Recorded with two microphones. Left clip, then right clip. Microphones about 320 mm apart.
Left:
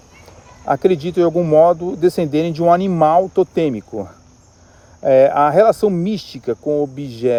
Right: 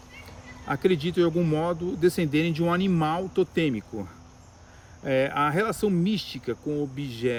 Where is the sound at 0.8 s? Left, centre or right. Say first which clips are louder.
Left 7 dB; centre.